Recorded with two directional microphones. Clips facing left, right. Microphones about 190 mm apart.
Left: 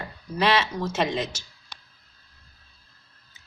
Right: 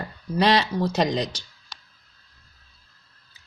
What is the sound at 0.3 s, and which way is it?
Speech, 35° right (ahead or behind).